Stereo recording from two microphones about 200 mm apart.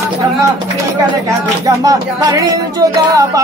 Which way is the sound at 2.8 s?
15° right (ahead or behind).